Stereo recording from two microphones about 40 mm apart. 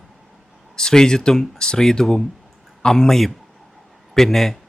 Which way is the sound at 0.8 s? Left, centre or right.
Centre.